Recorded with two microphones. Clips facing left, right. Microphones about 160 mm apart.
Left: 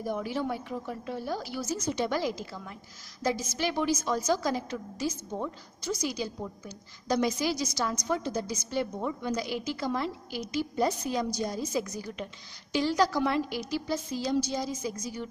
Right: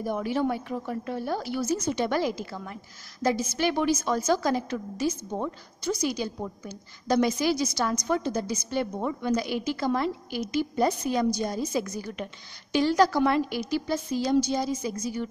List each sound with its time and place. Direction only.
0.0 s a woman's voice: 60° right (ahead or behind)